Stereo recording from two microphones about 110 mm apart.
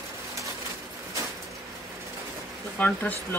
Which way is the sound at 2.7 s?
15° left (ahead or behind).